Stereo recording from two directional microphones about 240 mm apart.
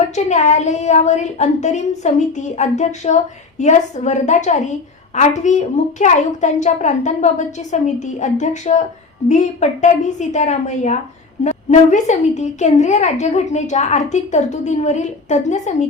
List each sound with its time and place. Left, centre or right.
0.3 s a woman's voice: left